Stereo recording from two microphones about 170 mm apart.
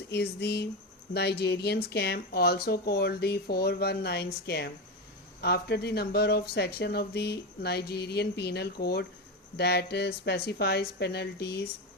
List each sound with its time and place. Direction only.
0.1 s speech: 70° left (ahead or behind)